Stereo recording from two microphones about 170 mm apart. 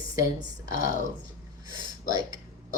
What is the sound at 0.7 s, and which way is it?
Speech, 55° left (ahead or behind).